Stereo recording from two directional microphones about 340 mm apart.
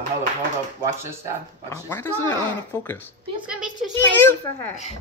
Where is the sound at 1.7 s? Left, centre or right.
Centre.